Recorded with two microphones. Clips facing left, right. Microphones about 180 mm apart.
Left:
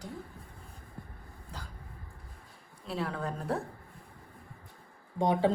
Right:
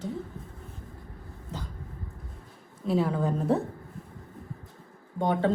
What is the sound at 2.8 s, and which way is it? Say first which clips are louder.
Speech: right 9 dB; centre (ahead or behind).